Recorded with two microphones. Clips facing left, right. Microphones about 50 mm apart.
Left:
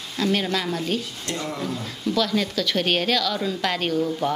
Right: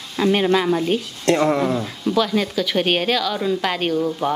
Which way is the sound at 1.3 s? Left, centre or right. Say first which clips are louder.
Right 13 dB; right.